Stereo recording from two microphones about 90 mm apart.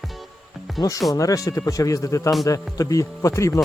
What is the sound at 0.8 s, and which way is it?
Speech, 40° left (ahead or behind).